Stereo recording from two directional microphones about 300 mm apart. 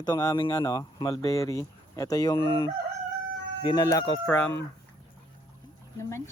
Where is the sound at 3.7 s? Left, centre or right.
Centre.